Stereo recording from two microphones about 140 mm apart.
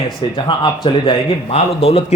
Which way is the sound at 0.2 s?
35° left (ahead or behind).